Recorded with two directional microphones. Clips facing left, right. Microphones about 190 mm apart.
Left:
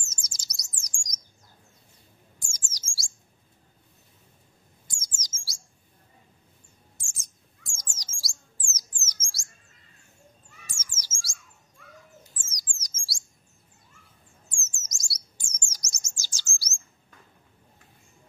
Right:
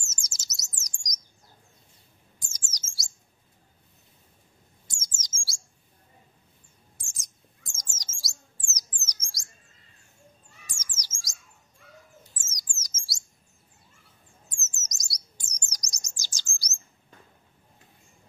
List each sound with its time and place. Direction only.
0.0 s chirp: 25° right (ahead or behind)
2.3 s chirp: 20° right (ahead or behind)
4.8 s chirp: 25° right (ahead or behind)
7.0 s bird: 15° right (ahead or behind)
10.7 s bird: 15° right (ahead or behind)
12.4 s bird: 25° right (ahead or behind)
12.9 s chirp: 25° right (ahead or behind)
14.6 s chirp: 20° right (ahead or behind)